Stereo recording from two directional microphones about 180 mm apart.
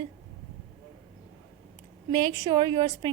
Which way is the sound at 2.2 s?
20° right (ahead or behind).